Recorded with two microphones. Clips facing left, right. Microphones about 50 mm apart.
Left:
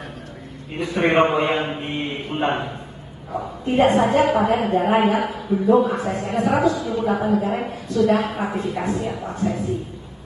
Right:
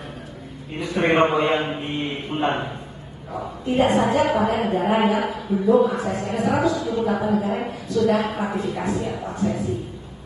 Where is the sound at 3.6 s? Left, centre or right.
Left.